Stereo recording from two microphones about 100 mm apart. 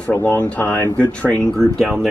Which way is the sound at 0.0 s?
15° left (ahead or behind).